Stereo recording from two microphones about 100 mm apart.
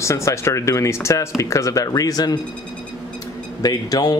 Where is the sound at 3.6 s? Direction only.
40° left (ahead or behind).